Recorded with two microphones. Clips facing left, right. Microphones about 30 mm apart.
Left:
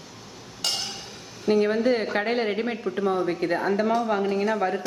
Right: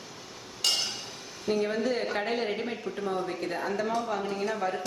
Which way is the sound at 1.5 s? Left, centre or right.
Left.